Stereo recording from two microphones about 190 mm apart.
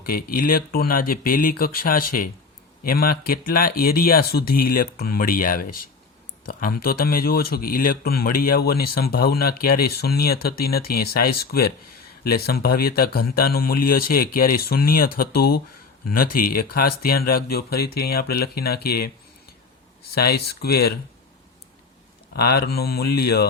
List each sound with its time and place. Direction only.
0.0 s speech: 50° left (ahead or behind)
22.4 s speech: 55° left (ahead or behind)